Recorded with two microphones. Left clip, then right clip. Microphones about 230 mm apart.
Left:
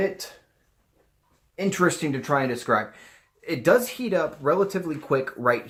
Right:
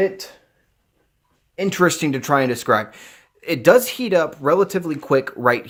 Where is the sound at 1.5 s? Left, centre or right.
Right.